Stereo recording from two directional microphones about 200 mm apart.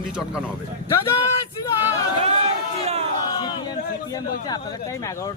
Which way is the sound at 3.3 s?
20° left (ahead or behind).